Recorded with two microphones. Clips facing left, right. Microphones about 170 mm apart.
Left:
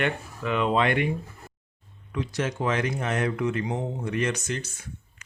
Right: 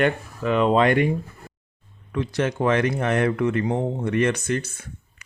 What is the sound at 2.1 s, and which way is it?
Speech, 60° right (ahead or behind).